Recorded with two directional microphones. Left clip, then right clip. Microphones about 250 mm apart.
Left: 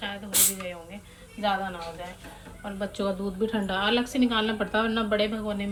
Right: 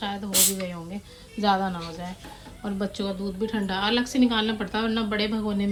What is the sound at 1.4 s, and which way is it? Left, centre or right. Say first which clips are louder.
Speech: right 4 dB; right.